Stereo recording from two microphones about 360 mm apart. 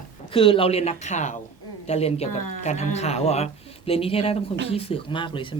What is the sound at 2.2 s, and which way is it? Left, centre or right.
Speech, left.